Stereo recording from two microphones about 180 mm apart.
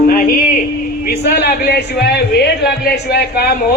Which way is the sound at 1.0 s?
65° left (ahead or behind).